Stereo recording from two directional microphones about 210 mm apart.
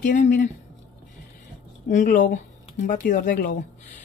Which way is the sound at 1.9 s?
35° left (ahead or behind).